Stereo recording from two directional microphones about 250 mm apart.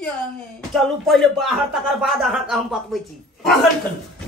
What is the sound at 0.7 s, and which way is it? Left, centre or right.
A woman's voice, centre.